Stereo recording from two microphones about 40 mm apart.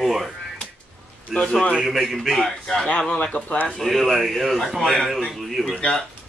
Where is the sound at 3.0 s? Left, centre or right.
Centre.